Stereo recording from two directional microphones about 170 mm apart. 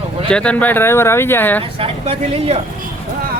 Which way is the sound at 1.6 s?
35° right (ahead or behind).